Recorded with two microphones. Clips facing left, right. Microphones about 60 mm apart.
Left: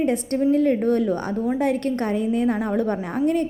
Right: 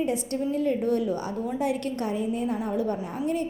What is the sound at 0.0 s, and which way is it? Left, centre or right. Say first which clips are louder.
A woman's voice: left 6 dB; left.